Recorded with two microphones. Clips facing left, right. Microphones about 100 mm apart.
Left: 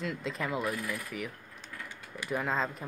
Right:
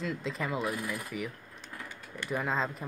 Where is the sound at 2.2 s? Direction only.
Centre (ahead or behind).